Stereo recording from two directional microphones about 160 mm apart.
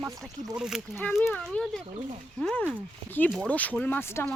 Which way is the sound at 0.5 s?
5° right (ahead or behind).